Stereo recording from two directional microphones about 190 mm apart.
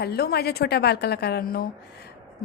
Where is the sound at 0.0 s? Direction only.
55° left (ahead or behind).